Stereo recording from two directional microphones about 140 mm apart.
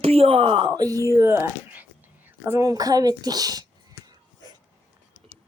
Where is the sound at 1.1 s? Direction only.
15° right (ahead or behind).